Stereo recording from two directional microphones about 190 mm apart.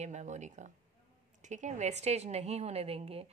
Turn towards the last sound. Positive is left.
turn(degrees=-30)  # may be behind; listen again after turning